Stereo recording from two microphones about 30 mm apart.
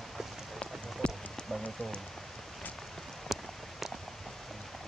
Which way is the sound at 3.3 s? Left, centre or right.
Centre.